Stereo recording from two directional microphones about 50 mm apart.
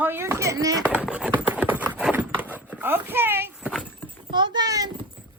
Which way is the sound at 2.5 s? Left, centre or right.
Right.